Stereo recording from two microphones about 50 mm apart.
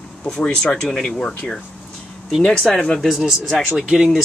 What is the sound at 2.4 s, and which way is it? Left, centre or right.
Speech, centre.